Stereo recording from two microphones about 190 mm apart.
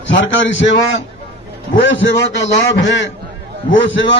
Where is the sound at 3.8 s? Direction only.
75° left (ahead or behind).